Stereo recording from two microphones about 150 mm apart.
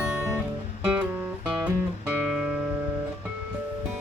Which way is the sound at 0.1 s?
15° right (ahead or behind).